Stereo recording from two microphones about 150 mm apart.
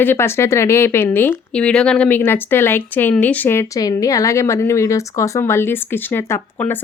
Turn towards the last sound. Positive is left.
turn(degrees=15)  # may be behind; listen again after turning